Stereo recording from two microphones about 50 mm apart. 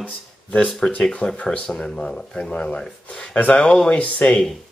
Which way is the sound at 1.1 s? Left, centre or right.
Left.